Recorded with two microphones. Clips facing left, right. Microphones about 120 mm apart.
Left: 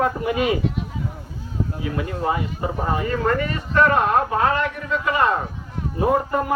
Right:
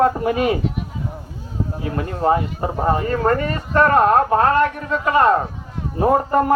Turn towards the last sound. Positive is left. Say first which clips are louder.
# right 4 dB
turn(degrees=-45)  # may be behind; listen again after turning